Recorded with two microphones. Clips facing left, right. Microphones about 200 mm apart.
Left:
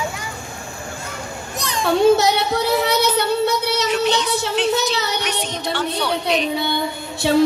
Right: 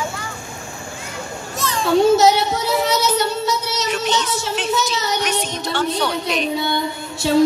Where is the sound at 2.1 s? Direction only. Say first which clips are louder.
Right 2 dB; 60° left (ahead or behind).